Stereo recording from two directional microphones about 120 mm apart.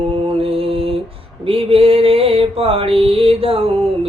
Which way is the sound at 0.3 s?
50° right (ahead or behind).